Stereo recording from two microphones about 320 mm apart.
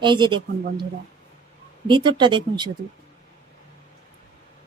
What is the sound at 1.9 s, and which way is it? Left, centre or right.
Speech, centre.